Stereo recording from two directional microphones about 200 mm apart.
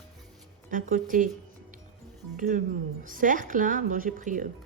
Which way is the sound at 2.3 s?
40° right (ahead or behind).